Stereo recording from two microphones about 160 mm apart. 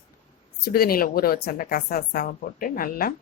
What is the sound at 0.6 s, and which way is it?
A woman's voice, 70° left (ahead or behind).